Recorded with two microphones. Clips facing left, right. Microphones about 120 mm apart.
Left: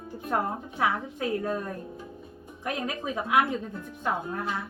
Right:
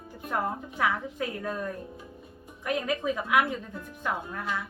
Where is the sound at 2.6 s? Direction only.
30° left (ahead or behind).